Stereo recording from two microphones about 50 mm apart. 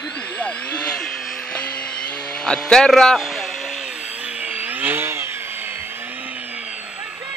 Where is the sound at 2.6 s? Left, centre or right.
Centre.